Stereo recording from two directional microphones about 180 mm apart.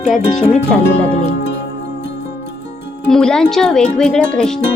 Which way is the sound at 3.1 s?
5° left (ahead or behind).